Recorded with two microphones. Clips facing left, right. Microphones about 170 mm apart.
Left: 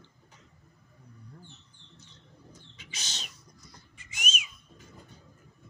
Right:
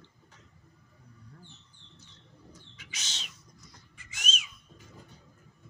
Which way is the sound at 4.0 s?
15° left (ahead or behind).